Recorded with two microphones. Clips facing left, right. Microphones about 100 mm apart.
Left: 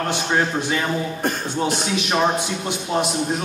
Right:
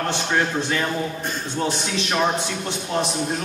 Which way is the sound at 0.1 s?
15° left (ahead or behind).